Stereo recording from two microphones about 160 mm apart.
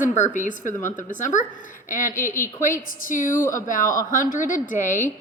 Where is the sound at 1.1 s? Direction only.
50° left (ahead or behind).